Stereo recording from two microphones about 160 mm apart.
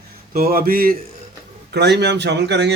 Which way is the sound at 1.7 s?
90° right.